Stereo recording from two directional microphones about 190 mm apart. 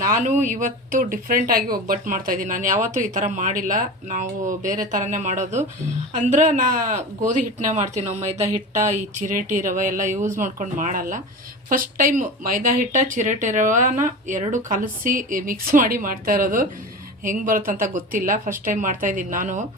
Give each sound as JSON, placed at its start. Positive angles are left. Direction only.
{"t": 0.0, "sound": "speech", "side_deg": -40}